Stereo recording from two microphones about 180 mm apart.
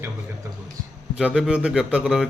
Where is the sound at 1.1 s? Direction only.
5° right (ahead or behind).